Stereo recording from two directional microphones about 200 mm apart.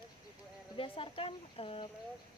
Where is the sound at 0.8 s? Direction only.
25° left (ahead or behind).